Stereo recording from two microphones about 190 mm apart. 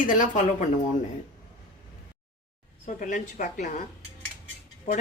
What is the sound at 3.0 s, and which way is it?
Speech, 40° left (ahead or behind).